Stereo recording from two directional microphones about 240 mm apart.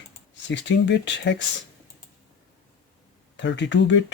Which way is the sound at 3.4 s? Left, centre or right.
Left.